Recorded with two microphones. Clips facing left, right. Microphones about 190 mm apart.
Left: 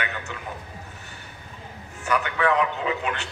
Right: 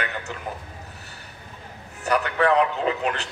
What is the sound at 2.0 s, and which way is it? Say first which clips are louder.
A man's voice: right 2 dB; 35° right (ahead or behind).